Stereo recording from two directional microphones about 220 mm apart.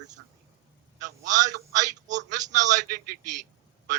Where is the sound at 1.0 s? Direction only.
35° right (ahead or behind).